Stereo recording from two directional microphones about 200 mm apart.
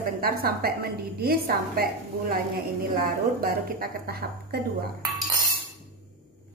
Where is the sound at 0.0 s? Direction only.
50° right (ahead or behind).